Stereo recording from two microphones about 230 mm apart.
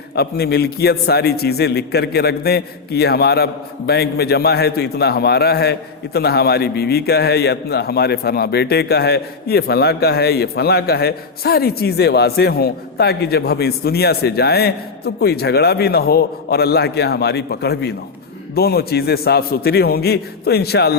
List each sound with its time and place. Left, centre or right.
0.2 s a man's voice: left